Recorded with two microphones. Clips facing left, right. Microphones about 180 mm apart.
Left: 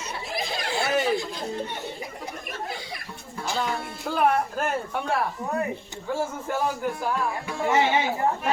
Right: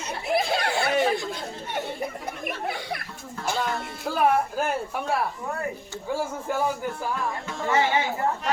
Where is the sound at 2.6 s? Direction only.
60° right (ahead or behind).